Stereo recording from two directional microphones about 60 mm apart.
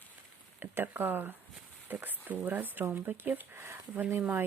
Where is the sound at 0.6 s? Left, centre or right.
Right.